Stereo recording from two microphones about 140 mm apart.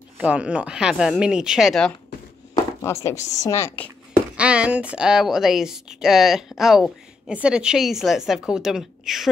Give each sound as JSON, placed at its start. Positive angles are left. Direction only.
{"t": 0.2, "sound": "a woman's voice", "side_deg": -10}
{"t": 2.8, "sound": "a woman's voice", "side_deg": 20}
{"t": 4.4, "sound": "a woman's voice", "side_deg": -10}